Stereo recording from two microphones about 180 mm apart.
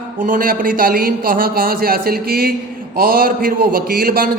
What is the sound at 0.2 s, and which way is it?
A woman's voice, 50° right (ahead or behind).